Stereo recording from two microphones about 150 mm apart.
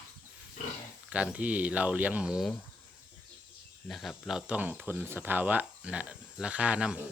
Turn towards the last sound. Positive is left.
turn(degrees=-5)  # may be behind; listen again after turning